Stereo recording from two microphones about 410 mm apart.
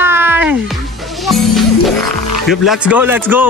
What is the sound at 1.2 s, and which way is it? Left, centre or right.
Music, centre.